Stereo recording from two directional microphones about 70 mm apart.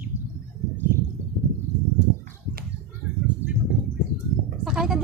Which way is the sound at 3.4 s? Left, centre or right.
Right.